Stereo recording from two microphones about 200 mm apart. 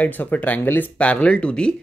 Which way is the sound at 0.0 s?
10° left (ahead or behind).